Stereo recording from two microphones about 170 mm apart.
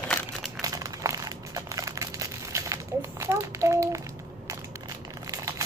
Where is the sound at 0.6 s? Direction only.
20° right (ahead or behind).